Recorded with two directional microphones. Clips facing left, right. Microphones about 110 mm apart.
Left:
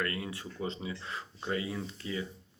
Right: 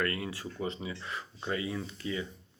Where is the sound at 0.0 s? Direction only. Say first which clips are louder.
Right 2 dB; 25° left (ahead or behind).